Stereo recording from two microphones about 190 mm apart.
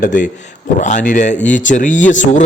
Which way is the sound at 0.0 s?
40° left (ahead or behind).